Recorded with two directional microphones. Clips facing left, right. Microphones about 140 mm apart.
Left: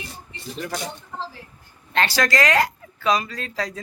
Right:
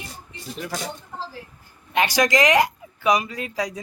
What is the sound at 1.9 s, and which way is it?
Speech, 15° right (ahead or behind).